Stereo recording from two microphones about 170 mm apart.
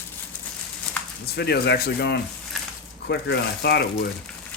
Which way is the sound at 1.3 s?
75° left (ahead or behind).